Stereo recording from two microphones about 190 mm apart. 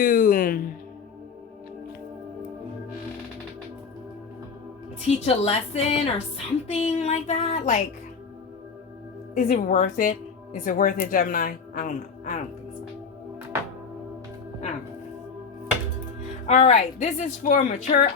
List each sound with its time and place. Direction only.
0.0 s speech: 45° left (ahead or behind)
5.0 s a woman's voice: 35° left (ahead or behind)
9.3 s a woman's voice: 45° left (ahead or behind)
16.5 s a woman's voice: 40° left (ahead or behind)